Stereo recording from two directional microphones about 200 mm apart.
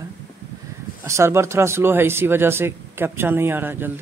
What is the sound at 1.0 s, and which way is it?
A man's voice, 15° right (ahead or behind).